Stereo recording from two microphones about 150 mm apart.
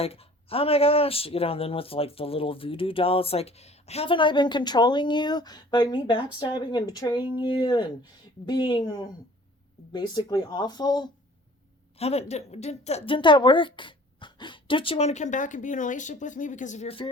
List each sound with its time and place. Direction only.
0.0 s speech: 40° left (ahead or behind)
11.9 s a woman's voice: 45° left (ahead or behind)